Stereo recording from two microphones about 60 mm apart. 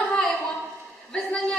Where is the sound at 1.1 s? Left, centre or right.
Centre.